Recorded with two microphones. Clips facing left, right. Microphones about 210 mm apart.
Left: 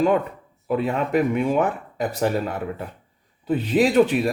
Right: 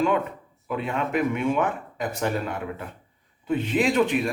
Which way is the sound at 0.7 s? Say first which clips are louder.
Left 5 dB; 35° left (ahead or behind).